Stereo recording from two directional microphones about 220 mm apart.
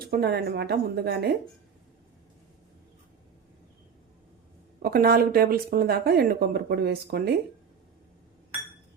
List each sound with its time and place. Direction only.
0.0 s speech: 45° right (ahead or behind)
4.8 s speech: 45° right (ahead or behind)